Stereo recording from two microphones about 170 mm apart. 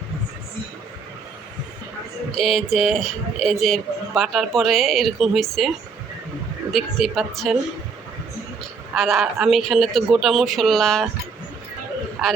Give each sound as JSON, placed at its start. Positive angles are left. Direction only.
{"t": 2.4, "sound": "a man's voice", "side_deg": 0}
{"t": 6.7, "sound": "a man's voice", "side_deg": 0}
{"t": 9.0, "sound": "a man's voice", "side_deg": 0}
{"t": 12.2, "sound": "a man's voice", "side_deg": 0}